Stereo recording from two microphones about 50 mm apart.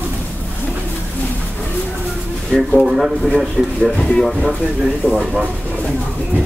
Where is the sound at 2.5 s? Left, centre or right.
Centre.